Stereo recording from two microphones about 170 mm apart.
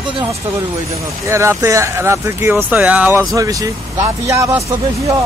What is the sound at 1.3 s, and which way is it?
Speech, 15° right (ahead or behind).